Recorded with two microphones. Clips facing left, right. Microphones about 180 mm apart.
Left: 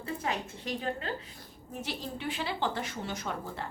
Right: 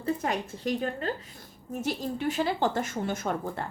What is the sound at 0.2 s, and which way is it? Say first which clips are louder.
A woman's voice: right 4 dB; 45° right (ahead or behind).